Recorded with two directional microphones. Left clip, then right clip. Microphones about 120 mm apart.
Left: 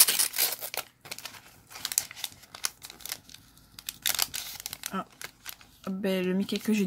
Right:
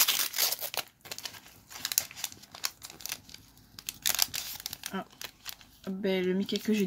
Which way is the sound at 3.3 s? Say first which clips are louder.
Even; 15° right (ahead or behind).